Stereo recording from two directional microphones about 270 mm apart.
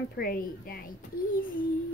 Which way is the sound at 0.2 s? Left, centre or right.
Left.